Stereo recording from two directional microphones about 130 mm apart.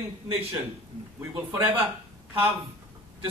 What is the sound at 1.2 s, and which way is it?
Speech, 15° right (ahead or behind).